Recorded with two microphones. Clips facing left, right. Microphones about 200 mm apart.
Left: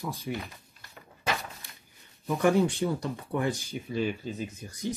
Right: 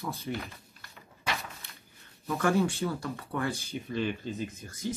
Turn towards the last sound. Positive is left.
turn(degrees=15)  # may be behind; listen again after turning